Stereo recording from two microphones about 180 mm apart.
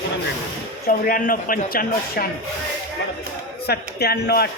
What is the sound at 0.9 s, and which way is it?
A man's voice, 50° left (ahead or behind).